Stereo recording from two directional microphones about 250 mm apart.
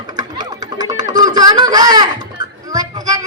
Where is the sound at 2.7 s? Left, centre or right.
Centre.